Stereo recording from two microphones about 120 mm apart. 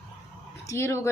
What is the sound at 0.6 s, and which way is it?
Speech, 25° left (ahead or behind).